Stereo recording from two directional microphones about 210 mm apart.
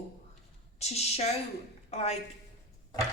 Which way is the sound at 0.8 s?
30° left (ahead or behind).